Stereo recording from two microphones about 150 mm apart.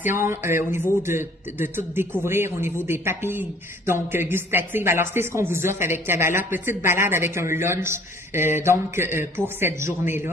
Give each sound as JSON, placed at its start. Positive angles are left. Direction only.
{"t": 0.1, "sound": "speech", "side_deg": -15}